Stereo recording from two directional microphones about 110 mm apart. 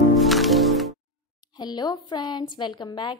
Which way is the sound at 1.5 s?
40° left (ahead or behind).